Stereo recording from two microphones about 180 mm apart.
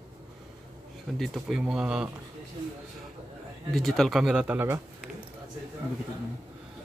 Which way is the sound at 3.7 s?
Centre (ahead or behind).